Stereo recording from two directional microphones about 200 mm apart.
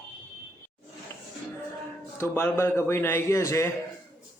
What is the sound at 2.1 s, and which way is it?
A man's voice, 10° left (ahead or behind).